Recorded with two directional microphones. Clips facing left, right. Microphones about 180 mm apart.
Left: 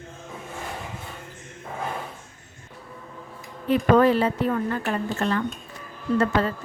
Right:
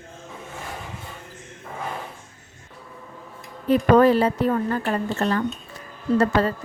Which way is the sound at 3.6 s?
40° right (ahead or behind).